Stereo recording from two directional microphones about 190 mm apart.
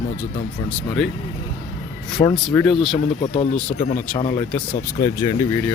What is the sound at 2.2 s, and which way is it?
Speech, 35° left (ahead or behind).